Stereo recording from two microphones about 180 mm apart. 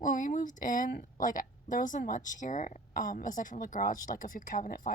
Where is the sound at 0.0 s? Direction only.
50° left (ahead or behind).